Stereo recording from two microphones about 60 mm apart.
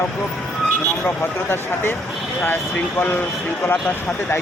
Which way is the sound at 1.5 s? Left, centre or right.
Left.